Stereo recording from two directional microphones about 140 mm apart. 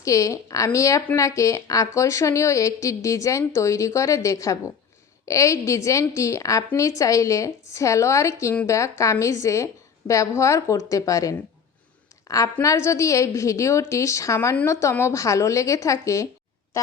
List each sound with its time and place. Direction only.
0.0 s speech: 20° left (ahead or behind)
12.6 s speech: 20° left (ahead or behind)